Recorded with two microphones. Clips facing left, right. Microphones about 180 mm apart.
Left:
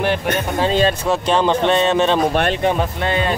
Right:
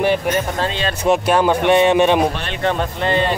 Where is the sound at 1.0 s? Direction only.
15° right (ahead or behind).